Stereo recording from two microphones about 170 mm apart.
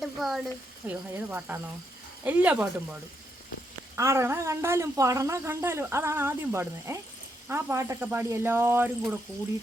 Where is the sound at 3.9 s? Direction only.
15° right (ahead or behind).